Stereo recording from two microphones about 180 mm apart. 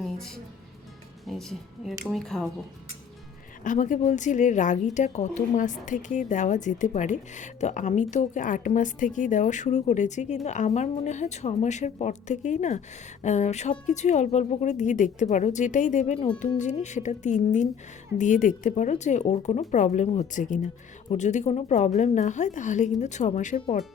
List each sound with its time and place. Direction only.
1.3 s speech: centre (ahead or behind)
3.6 s speech: 45° left (ahead or behind)
23.6 s speech: 30° left (ahead or behind)